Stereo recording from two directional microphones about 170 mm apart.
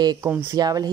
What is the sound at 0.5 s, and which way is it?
Speech, 25° right (ahead or behind).